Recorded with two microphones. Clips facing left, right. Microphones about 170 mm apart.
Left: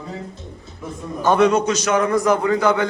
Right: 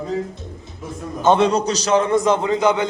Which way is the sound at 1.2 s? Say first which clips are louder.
Even; 25° right (ahead or behind).